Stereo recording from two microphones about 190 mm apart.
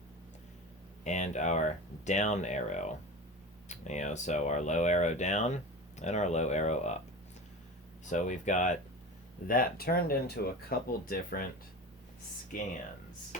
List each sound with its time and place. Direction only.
1.0 s speech: 40° left (ahead or behind)
8.1 s speech: 40° left (ahead or behind)